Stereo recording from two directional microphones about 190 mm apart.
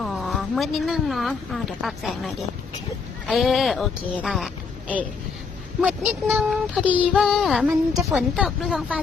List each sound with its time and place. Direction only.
0.0 s speech: centre (ahead or behind)
3.2 s child singing: centre (ahead or behind)